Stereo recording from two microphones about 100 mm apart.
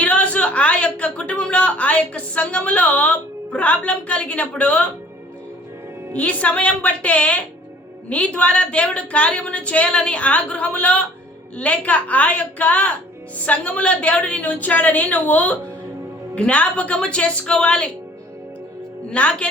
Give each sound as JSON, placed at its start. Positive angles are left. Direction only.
{"t": 0.0, "sound": "a sound", "side_deg": 15}
{"t": 6.1, "sound": "speech", "side_deg": 15}
{"t": 19.1, "sound": "speech", "side_deg": 10}